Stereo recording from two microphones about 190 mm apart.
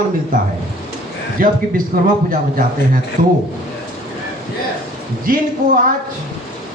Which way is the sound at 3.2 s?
45° right (ahead or behind).